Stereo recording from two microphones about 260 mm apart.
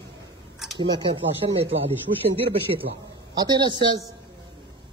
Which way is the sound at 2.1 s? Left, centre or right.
Right.